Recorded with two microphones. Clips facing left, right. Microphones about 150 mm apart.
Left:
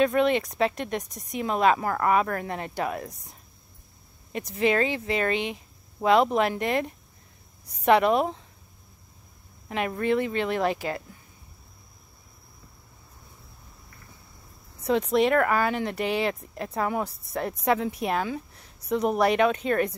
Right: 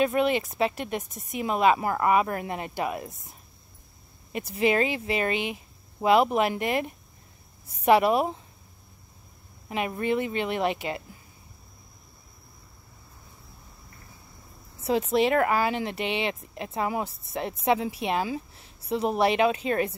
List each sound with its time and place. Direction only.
0.0 s speech: 5° right (ahead or behind)
9.7 s speech: 10° right (ahead or behind)
10.6 s speech: 20° right (ahead or behind)
14.9 s speech: 5° right (ahead or behind)
16.0 s speech: 25° right (ahead or behind)
17.2 s speech: 25° right (ahead or behind)